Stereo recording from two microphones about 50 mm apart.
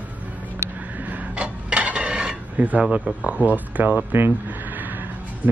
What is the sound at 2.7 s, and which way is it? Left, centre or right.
Speech, right.